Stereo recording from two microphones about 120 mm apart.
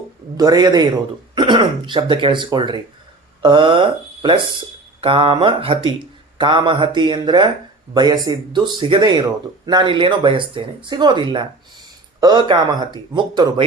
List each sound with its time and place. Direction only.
0.3 s speech: 35° right (ahead or behind)